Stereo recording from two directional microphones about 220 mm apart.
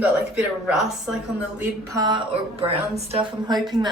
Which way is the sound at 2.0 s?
20° right (ahead or behind).